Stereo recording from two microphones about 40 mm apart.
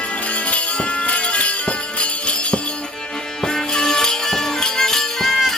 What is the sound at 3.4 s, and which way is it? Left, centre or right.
Music, centre.